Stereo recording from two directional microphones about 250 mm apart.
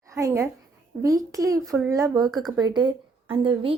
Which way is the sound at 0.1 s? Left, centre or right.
Centre.